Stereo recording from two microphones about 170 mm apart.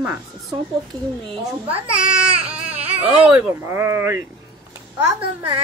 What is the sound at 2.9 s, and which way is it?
Speech, 10° right (ahead or behind).